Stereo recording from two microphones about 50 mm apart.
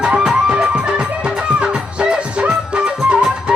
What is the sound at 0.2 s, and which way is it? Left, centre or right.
Music, centre.